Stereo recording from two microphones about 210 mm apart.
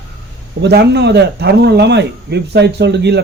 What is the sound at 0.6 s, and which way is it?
Speech, 50° right (ahead or behind).